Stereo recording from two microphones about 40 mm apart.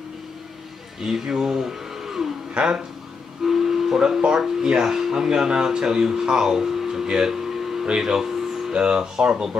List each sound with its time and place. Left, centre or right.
1.0 s speech: centre
2.5 s speech: right
3.4 s speech: centre
8.7 s speech: right